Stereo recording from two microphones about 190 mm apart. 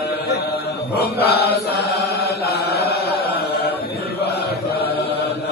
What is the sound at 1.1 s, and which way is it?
Mantra, 55° left (ahead or behind).